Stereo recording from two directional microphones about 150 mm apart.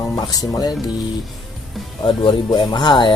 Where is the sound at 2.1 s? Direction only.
30° left (ahead or behind).